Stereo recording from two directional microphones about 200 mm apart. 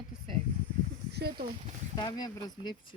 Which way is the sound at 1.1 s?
55° right (ahead or behind).